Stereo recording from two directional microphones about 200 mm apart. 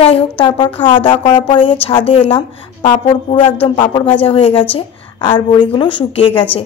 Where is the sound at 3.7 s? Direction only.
25° left (ahead or behind).